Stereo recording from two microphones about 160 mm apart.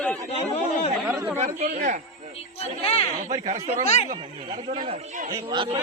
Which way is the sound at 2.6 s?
40° left (ahead or behind).